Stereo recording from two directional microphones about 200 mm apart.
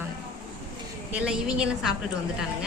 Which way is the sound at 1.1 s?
5° right (ahead or behind).